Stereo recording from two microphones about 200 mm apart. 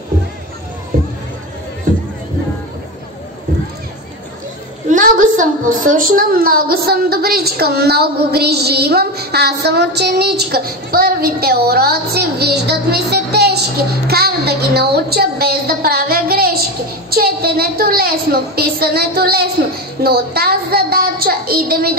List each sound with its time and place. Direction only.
4.8 s a woman's voice: 40° right (ahead or behind)